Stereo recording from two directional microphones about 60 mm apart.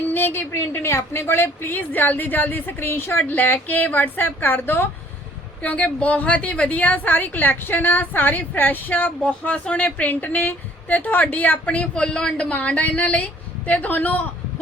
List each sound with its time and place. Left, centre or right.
0.1 s a sound: left
0.7 s a woman's voice: left
5.6 s a woman's voice: left
12.5 s a woman's voice: left